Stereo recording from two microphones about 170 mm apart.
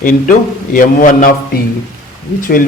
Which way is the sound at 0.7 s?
55° left (ahead or behind).